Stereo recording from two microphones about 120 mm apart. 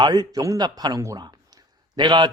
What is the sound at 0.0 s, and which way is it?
Speech, 35° right (ahead or behind).